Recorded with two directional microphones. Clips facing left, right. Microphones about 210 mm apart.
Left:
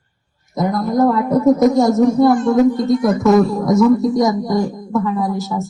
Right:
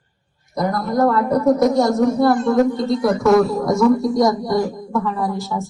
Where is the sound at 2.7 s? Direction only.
20° left (ahead or behind).